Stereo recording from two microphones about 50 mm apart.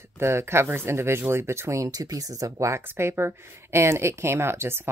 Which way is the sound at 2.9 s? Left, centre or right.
Right.